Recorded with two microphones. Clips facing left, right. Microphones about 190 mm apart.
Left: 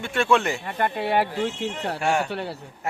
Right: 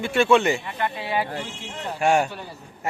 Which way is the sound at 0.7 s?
50° left (ahead or behind).